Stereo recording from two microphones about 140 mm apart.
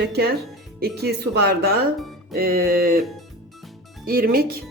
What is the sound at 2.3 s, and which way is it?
Speech, 90° right.